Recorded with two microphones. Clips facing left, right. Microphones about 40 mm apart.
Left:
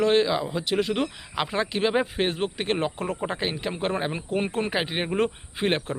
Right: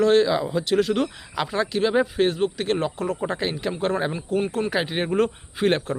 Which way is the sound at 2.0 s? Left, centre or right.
Left.